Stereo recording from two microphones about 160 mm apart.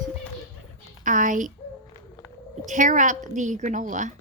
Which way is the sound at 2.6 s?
55° right (ahead or behind).